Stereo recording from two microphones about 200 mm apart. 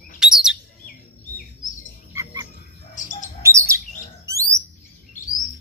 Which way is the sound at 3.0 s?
40° left (ahead or behind).